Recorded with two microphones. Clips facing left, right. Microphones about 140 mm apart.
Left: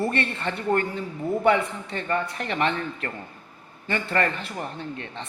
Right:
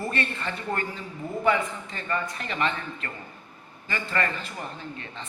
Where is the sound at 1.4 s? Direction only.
65° left (ahead or behind).